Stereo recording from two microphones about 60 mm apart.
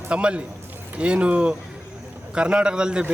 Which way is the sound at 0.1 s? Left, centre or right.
Centre.